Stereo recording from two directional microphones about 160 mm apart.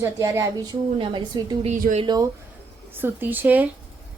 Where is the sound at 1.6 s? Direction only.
50° right (ahead or behind).